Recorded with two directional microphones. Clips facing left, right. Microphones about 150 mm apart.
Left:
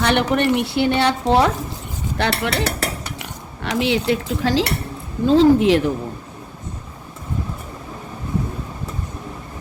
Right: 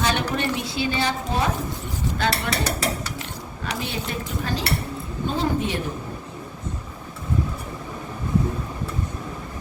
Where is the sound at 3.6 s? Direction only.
85° left.